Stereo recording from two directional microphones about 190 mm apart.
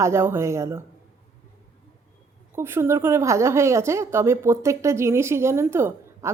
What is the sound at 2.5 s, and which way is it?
Speech, 15° right (ahead or behind).